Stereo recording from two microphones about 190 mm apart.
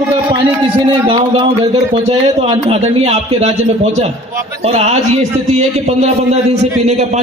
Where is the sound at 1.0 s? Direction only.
25° right (ahead or behind).